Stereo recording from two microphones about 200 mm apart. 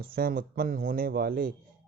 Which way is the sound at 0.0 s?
50° right (ahead or behind).